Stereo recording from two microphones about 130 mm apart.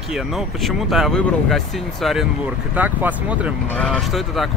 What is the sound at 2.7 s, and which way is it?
Speech, 10° right (ahead or behind).